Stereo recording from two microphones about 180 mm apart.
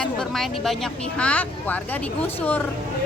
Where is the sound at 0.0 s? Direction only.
Centre (ahead or behind).